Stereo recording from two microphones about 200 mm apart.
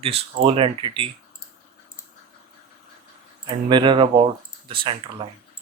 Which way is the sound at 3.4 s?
25° right (ahead or behind).